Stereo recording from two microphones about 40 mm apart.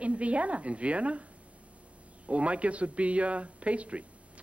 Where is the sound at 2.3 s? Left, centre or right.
Right.